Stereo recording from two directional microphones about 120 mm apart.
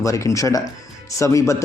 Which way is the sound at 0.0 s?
25° left (ahead or behind).